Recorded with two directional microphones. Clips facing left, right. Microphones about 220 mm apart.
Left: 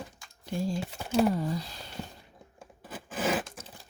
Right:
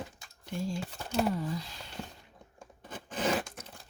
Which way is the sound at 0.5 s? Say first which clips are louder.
Left 4 dB; 35° left (ahead or behind).